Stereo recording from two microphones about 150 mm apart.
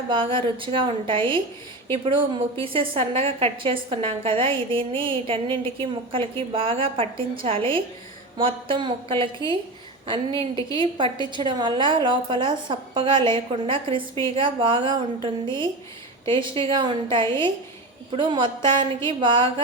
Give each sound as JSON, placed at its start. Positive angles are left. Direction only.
{"t": 0.1, "sound": "a woman's voice", "side_deg": -35}